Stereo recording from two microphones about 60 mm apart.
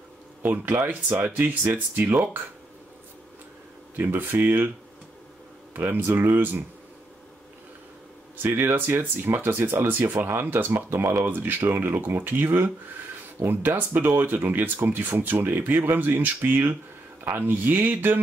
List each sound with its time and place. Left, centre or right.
0.4 s speech: right
3.9 s speech: right
5.8 s speech: right
8.4 s speech: right